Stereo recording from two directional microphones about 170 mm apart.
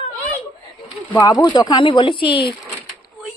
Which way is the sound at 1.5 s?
25° left (ahead or behind).